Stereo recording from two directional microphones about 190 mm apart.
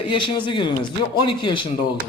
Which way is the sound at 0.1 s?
25° left (ahead or behind).